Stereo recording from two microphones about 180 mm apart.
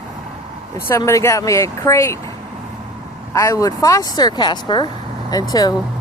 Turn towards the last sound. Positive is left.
turn(degrees=20)  # may be behind; listen again after turning